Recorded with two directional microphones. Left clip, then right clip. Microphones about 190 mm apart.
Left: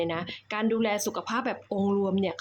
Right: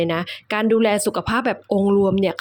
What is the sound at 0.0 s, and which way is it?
A woman's voice, 30° right (ahead or behind).